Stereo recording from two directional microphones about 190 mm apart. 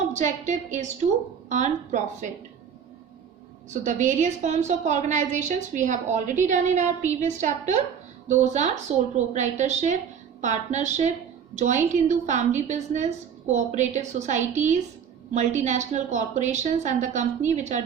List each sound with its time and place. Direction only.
0.1 s a woman's voice: 40° right (ahead or behind)
3.7 s a woman's voice: 40° right (ahead or behind)